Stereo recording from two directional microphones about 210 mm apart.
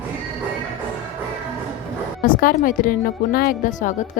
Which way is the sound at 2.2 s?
40° left (ahead or behind).